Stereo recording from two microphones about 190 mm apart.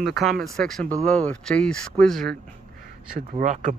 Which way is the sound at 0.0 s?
Centre (ahead or behind).